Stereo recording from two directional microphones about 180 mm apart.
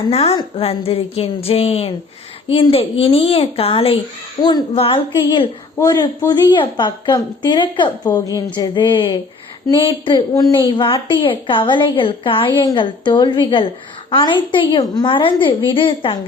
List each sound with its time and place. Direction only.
0.1 s a woman's voice: 35° left (ahead or behind)